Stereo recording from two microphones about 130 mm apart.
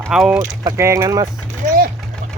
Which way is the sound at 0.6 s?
20° right (ahead or behind).